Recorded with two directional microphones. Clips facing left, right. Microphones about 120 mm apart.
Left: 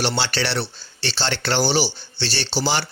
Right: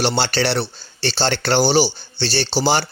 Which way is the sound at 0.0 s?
35° right (ahead or behind).